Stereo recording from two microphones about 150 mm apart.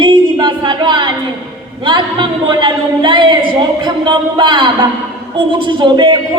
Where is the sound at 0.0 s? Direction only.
30° right (ahead or behind).